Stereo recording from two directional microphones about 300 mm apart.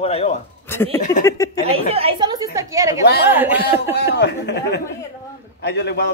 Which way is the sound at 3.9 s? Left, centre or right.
Left.